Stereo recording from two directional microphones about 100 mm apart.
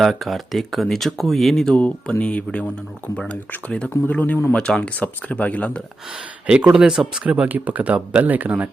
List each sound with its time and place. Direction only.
0.0 s speech: centre (ahead or behind)
6.5 s speech: 10° right (ahead or behind)